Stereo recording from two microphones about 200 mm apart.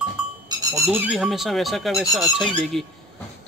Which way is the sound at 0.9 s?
5° right (ahead or behind).